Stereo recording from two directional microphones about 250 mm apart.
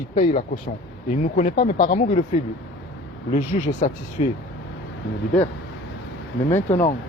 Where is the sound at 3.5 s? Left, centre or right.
Left.